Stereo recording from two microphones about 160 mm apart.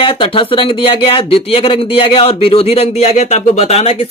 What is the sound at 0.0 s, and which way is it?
Speech, 35° left (ahead or behind).